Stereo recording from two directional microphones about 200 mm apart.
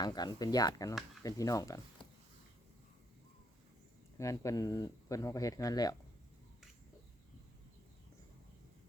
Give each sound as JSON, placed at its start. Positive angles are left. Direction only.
{"t": 0.0, "sound": "speech", "side_deg": 20}
{"t": 4.2, "sound": "speech", "side_deg": 15}